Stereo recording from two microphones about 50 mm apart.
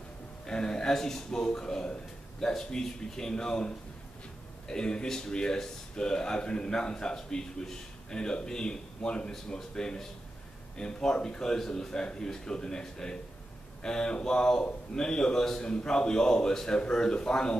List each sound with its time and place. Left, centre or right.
0.5 s speech: centre